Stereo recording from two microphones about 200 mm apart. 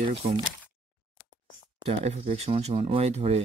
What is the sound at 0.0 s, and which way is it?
Speech, 25° right (ahead or behind).